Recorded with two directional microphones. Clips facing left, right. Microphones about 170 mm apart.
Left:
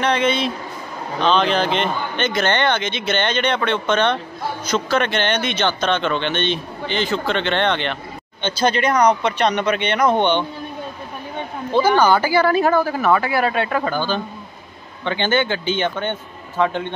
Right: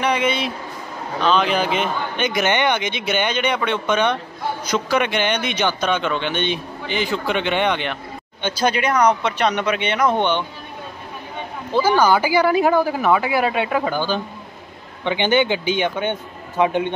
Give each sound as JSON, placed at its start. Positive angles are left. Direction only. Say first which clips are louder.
{"t": 0.0, "sound": "speech", "louder": "left 2 dB", "side_deg": -10}
{"t": 11.7, "sound": "speech", "louder": "left 1 dB", "side_deg": -10}